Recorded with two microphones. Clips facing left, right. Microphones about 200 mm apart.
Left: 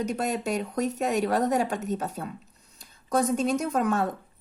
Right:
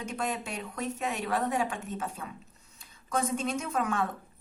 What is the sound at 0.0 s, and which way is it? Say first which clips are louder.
Speech: left 6 dB; 40° left (ahead or behind).